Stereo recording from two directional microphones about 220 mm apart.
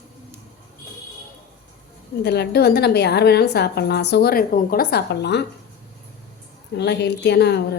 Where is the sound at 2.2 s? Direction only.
50° left (ahead or behind).